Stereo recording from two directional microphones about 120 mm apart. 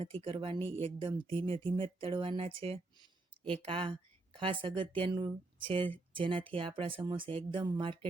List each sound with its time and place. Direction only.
0.0 s speech: 50° right (ahead or behind)